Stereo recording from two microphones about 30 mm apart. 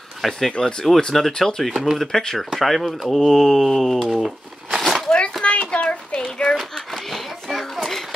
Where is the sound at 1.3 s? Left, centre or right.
Left.